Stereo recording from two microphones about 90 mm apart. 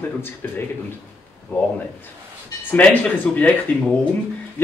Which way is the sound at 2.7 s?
20° left (ahead or behind).